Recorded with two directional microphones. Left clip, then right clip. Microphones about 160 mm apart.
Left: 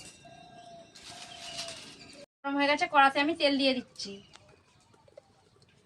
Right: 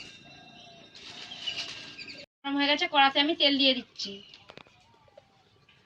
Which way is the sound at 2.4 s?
25° left (ahead or behind).